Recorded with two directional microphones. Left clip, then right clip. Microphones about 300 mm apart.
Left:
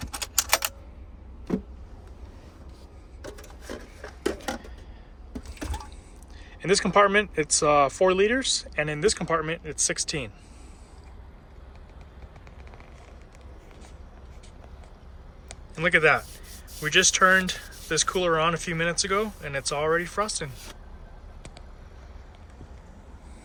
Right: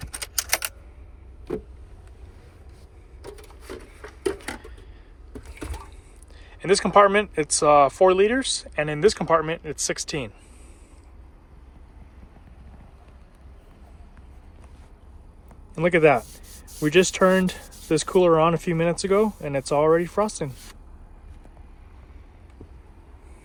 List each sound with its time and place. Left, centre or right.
5.6 s a sound: centre
6.6 s speech: centre
15.7 s speech: centre